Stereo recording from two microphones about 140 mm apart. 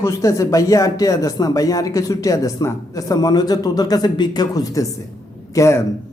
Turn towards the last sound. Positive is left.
turn(degrees=20)  # may be behind; listen again after turning